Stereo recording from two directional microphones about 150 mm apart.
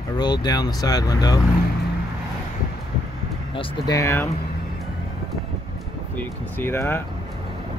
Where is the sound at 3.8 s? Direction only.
20° left (ahead or behind).